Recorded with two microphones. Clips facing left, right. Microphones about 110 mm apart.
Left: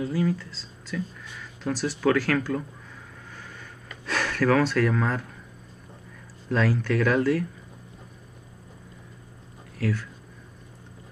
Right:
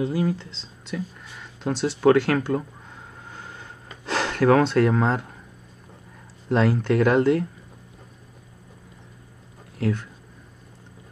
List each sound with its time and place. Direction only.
0.0 s speech: 25° right (ahead or behind)
6.5 s speech: 20° right (ahead or behind)
9.8 s speech: 20° right (ahead or behind)